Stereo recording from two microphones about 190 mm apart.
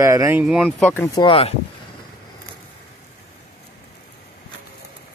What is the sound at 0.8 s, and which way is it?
Speech, 10° left (ahead or behind).